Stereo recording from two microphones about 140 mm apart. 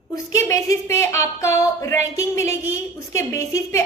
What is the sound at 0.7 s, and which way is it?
A woman's voice, 20° left (ahead or behind).